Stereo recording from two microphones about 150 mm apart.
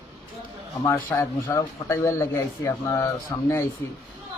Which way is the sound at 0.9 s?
15° left (ahead or behind).